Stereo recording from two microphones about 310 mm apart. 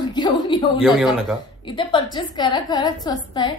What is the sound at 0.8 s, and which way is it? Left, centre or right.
Speech, centre.